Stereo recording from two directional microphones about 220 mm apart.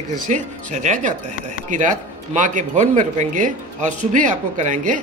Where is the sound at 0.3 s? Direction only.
35° right (ahead or behind).